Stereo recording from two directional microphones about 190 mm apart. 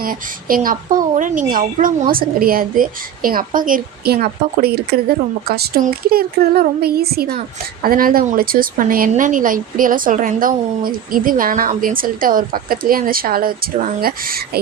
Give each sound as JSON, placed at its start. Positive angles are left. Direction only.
{"t": 0.0, "sound": "a woman's voice", "side_deg": -50}